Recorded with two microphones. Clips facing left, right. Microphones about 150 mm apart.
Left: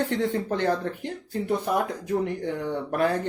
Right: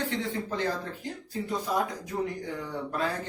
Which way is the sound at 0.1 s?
60° left (ahead or behind).